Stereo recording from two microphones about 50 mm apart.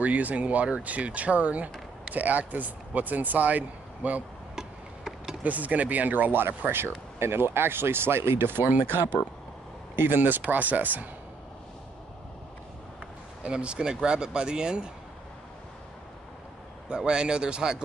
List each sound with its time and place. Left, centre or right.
0.0 s speech: right
4.6 s tick-tock: centre
5.4 s speech: right
9.9 s speech: right
13.4 s speech: right
16.9 s speech: centre